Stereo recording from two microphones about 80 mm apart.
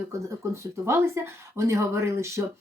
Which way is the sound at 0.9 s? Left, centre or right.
Right.